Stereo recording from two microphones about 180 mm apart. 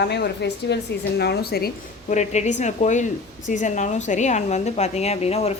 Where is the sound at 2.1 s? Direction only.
40° left (ahead or behind).